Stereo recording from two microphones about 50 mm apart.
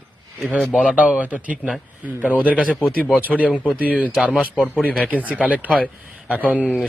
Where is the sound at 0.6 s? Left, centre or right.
Centre.